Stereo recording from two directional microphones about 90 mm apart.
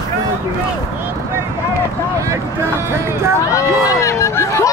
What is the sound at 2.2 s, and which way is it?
Speech, 30° right (ahead or behind).